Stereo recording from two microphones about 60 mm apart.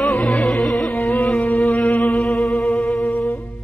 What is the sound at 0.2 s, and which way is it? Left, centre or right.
Music, centre.